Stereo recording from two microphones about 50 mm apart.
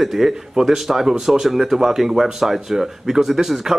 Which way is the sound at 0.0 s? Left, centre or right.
Centre.